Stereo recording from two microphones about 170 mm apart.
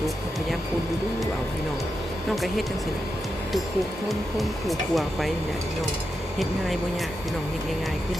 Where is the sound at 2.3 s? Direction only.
Centre (ahead or behind).